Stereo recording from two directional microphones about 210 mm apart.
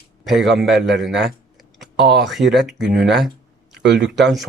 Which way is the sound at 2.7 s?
55° right (ahead or behind).